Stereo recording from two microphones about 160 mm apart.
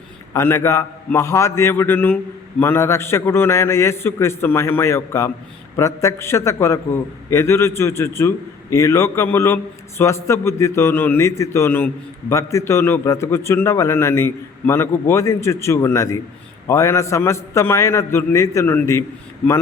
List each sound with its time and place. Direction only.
0.3 s a man's voice: 15° left (ahead or behind)